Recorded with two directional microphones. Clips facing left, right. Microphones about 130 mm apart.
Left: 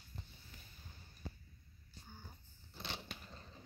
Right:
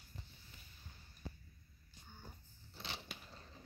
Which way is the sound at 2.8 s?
Centre (ahead or behind).